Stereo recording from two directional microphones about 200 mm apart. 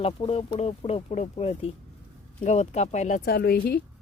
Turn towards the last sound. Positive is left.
turn(degrees=50)  # may be behind; listen again after turning